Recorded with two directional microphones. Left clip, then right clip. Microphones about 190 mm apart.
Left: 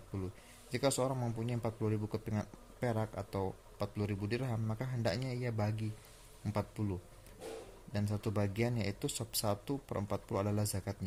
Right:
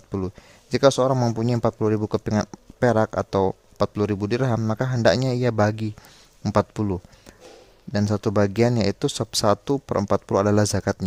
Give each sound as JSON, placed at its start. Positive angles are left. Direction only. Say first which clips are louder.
{"t": 0.7, "sound": "a man's voice", "louder": "right 16 dB", "side_deg": -50}